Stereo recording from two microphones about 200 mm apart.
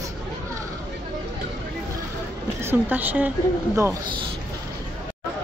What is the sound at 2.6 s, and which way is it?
Speech, 10° right (ahead or behind).